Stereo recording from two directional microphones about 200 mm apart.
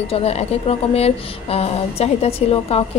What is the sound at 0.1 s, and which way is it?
A woman's voice, 30° left (ahead or behind).